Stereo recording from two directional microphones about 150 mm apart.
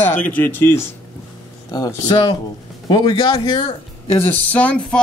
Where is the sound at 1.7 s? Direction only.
25° left (ahead or behind).